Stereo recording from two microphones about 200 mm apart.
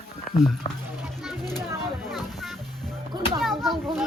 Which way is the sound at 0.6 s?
35° left (ahead or behind).